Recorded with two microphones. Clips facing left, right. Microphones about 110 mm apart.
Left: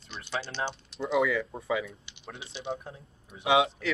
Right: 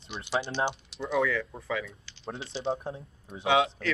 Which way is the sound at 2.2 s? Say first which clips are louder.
Right 7 dB; 25° right (ahead or behind).